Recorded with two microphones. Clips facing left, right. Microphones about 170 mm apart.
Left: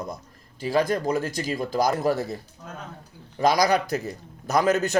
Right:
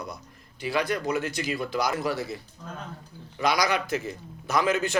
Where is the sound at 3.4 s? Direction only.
40° left (ahead or behind).